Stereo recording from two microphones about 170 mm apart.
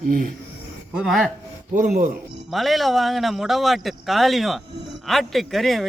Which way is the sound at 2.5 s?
Centre (ahead or behind).